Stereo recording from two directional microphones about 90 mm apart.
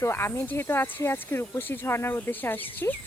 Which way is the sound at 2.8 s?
35° left (ahead or behind).